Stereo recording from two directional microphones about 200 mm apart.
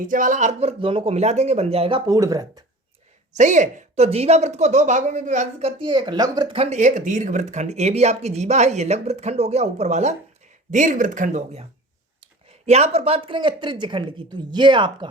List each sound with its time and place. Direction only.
0.0 s a woman's voice: 40° right (ahead or behind)
2.0 s speech: 15° right (ahead or behind)
3.3 s a woman's voice: 35° right (ahead or behind)